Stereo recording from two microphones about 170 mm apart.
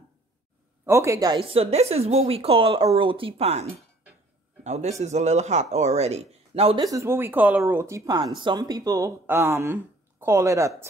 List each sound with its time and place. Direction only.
0.8 s speech: 15° right (ahead or behind); by 3.6 s 35° right (ahead or behind)
4.6 s speech: 40° right (ahead or behind)
6.8 s speech: 20° right (ahead or behind)